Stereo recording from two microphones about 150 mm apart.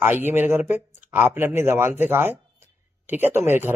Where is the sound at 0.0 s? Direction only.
15° right (ahead or behind).